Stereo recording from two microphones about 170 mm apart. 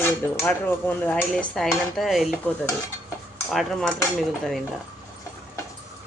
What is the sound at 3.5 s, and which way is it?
Speech, centre (ahead or behind).